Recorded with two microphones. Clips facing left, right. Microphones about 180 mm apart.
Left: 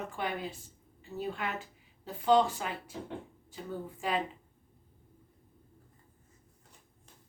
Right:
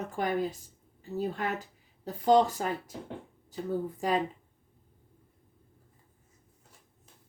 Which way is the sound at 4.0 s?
40° right (ahead or behind).